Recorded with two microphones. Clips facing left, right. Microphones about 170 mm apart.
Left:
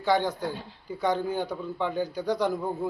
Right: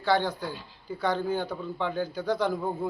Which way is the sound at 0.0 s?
20° left (ahead or behind).